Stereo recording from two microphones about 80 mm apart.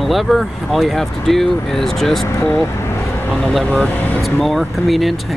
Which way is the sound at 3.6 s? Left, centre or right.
Centre.